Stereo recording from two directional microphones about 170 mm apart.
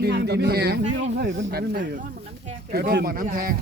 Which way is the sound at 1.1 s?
85° right.